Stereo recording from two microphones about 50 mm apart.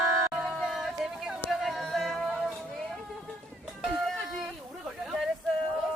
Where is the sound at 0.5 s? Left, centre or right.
Centre.